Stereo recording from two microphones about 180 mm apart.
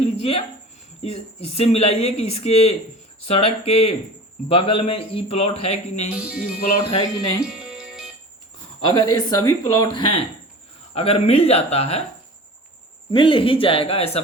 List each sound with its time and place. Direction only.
0.2 s speech: 35° left (ahead or behind)
6.1 s speech: 5° right (ahead or behind)
6.9 s speech: 20° left (ahead or behind)
7.4 s music: 5° right (ahead or behind)
8.9 s speech: 20° left (ahead or behind)
13.1 s speech: 30° left (ahead or behind)